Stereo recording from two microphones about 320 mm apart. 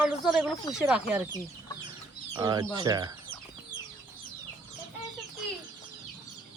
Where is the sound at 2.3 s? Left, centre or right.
Centre.